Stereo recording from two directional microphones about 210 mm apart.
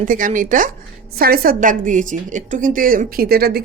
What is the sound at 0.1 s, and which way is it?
A woman's voice, 40° right (ahead or behind).